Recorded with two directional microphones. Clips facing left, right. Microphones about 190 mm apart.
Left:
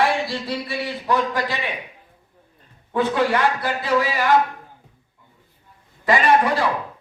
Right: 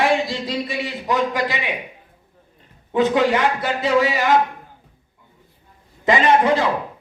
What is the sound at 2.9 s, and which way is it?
A man's voice, 20° right (ahead or behind).